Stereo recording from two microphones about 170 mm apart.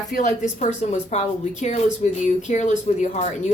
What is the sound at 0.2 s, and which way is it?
Speech, 45° left (ahead or behind).